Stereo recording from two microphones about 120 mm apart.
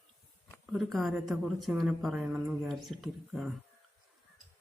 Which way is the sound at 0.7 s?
Centre (ahead or behind).